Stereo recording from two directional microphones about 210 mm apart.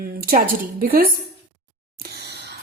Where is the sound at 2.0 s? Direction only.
50° right (ahead or behind).